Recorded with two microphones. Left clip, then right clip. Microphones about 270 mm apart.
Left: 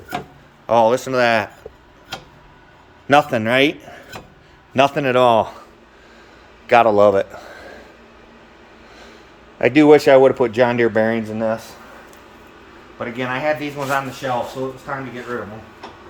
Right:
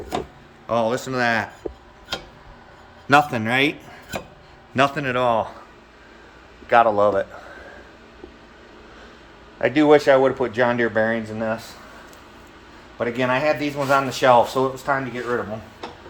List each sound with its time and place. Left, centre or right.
0.7 s a man's voice: centre
3.1 s a man's voice: centre
5.1 s speech: left
6.7 s speech: left
9.6 s speech: left
13.0 s a man's voice: centre
14.1 s speech: centre